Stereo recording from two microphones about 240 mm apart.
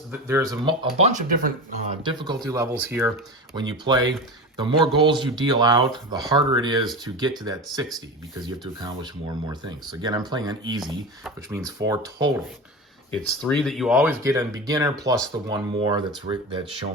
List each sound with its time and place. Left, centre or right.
0.1 s speech: centre; by 2.0 s right
2.0 s speech: centre
13.1 s speech: centre
14.3 s speech: centre